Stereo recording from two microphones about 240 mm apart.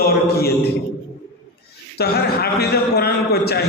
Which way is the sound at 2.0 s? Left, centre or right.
Left.